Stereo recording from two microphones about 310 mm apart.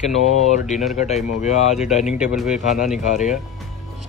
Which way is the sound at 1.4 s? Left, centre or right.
Left.